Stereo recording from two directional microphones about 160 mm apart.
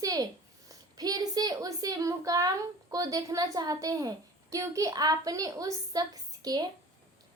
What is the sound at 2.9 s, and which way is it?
A woman's voice, 20° right (ahead or behind).